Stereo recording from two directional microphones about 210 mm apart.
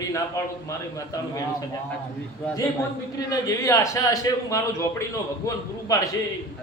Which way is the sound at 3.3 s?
15° left (ahead or behind).